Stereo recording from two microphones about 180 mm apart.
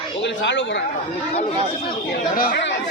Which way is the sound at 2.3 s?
55° left (ahead or behind).